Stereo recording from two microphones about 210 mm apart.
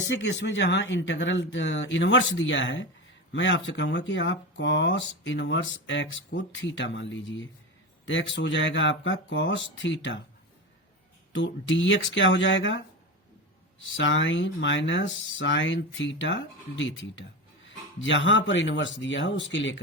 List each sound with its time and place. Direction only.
0.0 s speech: 60° left (ahead or behind)
11.3 s speech: 60° left (ahead or behind)
13.9 s speech: 60° left (ahead or behind)